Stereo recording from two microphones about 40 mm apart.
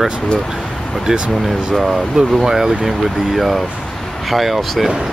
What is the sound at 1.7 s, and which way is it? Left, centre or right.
Speech, centre.